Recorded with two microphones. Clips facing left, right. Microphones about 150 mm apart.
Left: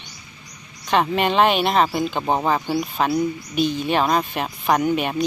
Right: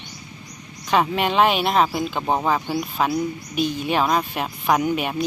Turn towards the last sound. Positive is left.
turn(degrees=-5)  # may be behind; listen again after turning